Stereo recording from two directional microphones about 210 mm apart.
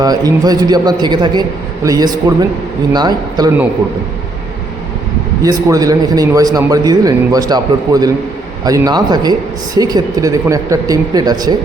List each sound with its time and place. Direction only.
0.0 s a man's voice: 20° right (ahead or behind)
5.4 s a man's voice: 15° right (ahead or behind)